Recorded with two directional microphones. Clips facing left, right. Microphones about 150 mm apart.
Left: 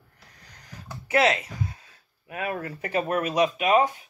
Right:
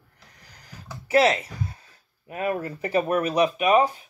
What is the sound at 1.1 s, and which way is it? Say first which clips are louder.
Speech: right 3 dB; 30° right (ahead or behind).